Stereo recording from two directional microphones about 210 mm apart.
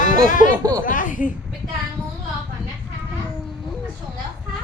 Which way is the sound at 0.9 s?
40° left (ahead or behind).